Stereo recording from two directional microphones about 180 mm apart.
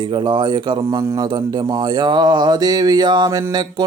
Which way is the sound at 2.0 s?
25° right (ahead or behind).